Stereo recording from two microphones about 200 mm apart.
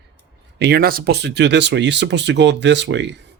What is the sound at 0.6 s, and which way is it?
Speech, 55° right (ahead or behind).